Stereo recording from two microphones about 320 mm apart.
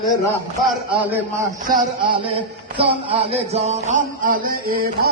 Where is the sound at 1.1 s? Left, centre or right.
Centre.